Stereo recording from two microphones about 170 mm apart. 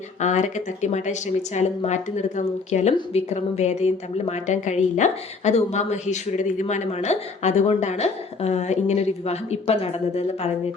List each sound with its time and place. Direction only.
0.2 s a woman's voice: 45° left (ahead or behind)